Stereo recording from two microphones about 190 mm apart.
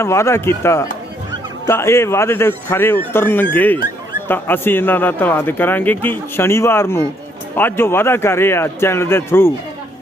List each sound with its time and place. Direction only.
0.0 s a man's voice: 15° left (ahead or behind)